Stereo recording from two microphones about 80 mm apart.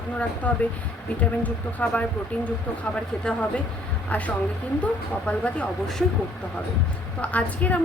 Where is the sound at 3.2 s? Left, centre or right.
Centre.